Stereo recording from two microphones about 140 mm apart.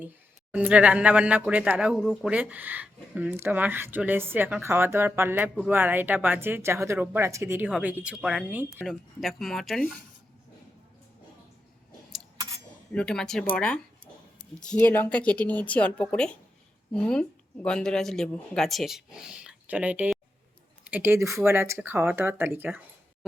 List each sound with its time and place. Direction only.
0.5 s speech: 10° right (ahead or behind)
2.3 s speech: 10° right (ahead or behind)
9.2 s speech: centre (ahead or behind)
12.9 s speech: 5° left (ahead or behind); by 22.8 s 15° right (ahead or behind)